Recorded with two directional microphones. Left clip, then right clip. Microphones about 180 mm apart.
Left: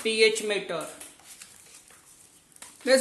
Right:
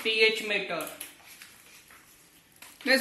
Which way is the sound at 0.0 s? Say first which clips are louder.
Left 2 dB; 75° left (ahead or behind).